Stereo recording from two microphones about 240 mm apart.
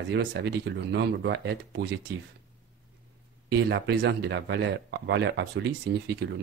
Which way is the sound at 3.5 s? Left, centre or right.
Right.